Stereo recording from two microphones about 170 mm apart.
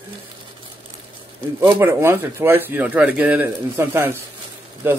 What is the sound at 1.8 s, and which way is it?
Speech, 15° right (ahead or behind).